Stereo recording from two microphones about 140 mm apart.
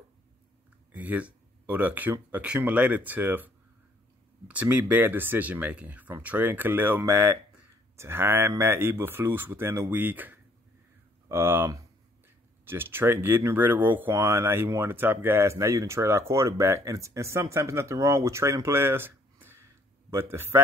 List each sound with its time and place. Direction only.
0.9 s speech: 10° right (ahead or behind)